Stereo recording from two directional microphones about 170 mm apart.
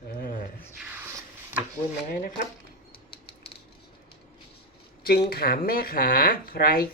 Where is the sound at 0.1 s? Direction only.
60° left (ahead or behind).